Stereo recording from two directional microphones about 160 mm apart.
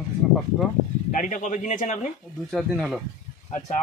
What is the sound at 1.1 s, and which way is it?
Speech, 50° left (ahead or behind).